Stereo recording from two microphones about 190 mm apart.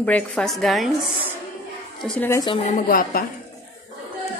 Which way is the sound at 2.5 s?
40° left (ahead or behind).